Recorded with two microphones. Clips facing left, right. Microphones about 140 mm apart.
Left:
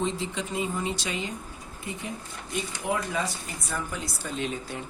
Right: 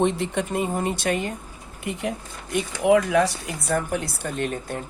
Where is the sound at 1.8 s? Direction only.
70° right (ahead or behind).